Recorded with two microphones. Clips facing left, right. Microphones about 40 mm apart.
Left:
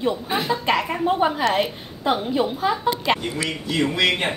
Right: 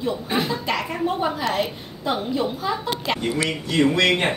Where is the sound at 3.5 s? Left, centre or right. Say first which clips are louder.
Right 3 dB; centre.